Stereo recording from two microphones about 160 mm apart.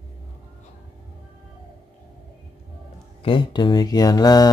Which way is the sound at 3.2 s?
30° left (ahead or behind).